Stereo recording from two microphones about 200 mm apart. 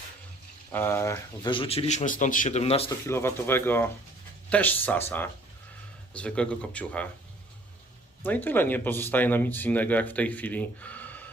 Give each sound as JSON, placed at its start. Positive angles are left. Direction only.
{"t": 0.7, "sound": "speech", "side_deg": 10}
{"t": 1.5, "sound": "a man's voice", "side_deg": 25}
{"t": 3.1, "sound": "speech", "side_deg": 10}
{"t": 8.2, "sound": "speech", "side_deg": 10}